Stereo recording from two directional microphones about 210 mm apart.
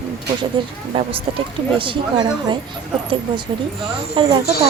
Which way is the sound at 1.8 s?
20° right (ahead or behind).